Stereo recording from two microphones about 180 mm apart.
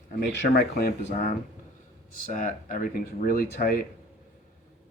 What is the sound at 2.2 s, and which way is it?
Speech, 50° left (ahead or behind).